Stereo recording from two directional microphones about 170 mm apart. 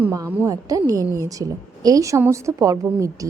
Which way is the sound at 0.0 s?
15° right (ahead or behind).